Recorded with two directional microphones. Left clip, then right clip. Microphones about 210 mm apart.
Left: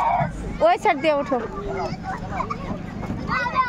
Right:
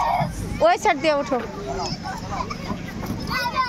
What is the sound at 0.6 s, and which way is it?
Speech, 5° left (ahead or behind).